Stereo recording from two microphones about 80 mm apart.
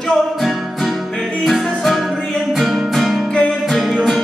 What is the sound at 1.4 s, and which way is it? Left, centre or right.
Music, centre.